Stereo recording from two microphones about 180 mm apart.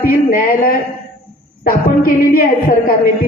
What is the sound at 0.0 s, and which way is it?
Speech, 55° left (ahead or behind).